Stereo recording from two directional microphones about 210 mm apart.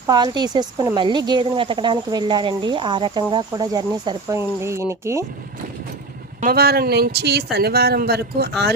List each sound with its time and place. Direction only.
0.1 s speech: 20° right (ahead or behind)
6.4 s speech: 45° right (ahead or behind)